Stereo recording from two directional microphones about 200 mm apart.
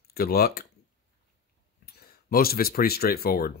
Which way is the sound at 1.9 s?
50° left (ahead or behind).